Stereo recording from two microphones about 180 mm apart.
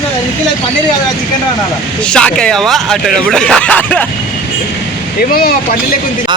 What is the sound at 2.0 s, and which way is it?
Speech, 5° left (ahead or behind).